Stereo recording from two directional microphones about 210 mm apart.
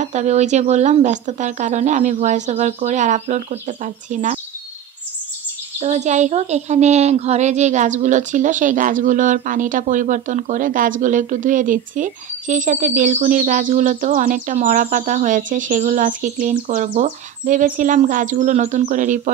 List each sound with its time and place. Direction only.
0.0 s a woman's voice: 35° right (ahead or behind)
5.8 s a woman's voice: 30° right (ahead or behind)